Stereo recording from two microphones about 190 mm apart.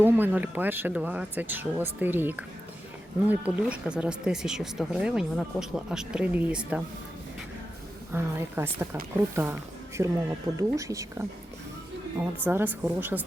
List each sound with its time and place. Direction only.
0.0 s speech: 10° right (ahead or behind)
8.1 s speech: 10° right (ahead or behind)